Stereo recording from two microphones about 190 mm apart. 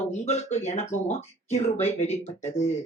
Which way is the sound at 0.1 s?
35° left (ahead or behind).